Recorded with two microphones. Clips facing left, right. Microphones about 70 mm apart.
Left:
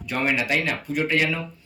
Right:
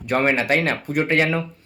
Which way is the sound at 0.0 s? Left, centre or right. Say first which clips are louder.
Right 5 dB; right.